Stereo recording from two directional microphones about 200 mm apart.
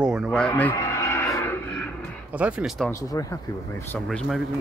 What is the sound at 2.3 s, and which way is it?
Speech, 5° right (ahead or behind).